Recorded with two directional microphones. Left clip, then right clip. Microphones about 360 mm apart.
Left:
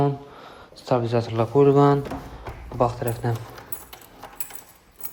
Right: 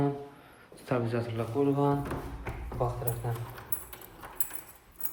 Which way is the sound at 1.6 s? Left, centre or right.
Left.